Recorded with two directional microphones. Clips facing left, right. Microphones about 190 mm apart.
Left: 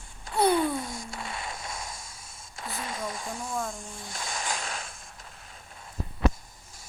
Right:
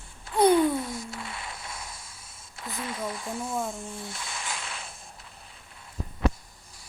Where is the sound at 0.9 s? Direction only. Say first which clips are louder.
Right 1 dB; 45° left (ahead or behind).